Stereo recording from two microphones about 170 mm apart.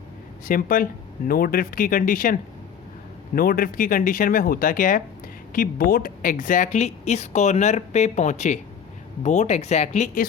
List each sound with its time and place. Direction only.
0.4 s speech: 55° left (ahead or behind)